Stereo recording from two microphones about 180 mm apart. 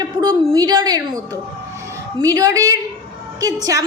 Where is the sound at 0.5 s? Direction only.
20° right (ahead or behind).